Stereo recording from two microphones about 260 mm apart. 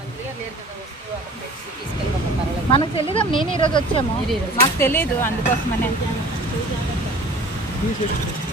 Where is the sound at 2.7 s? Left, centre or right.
Left.